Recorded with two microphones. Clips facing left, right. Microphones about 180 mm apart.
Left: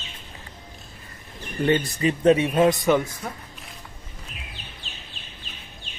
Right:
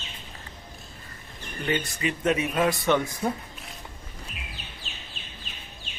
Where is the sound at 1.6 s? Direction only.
35° left (ahead or behind).